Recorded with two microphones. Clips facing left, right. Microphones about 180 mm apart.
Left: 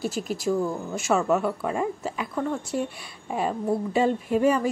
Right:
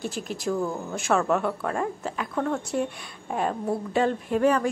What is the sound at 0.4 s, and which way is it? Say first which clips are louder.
A woman's voice: left 1 dB; centre (ahead or behind).